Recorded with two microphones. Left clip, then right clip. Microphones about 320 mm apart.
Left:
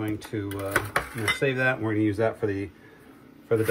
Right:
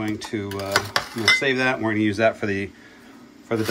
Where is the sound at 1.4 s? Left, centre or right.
Right.